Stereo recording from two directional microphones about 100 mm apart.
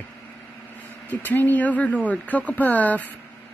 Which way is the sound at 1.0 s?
20° left (ahead or behind).